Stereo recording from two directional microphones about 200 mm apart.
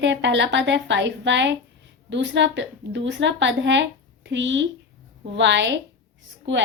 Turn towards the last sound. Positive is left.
turn(degrees=-65)  # may be behind; listen again after turning